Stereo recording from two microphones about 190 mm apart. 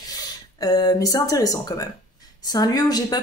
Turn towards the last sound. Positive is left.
turn(degrees=20)  # may be behind; listen again after turning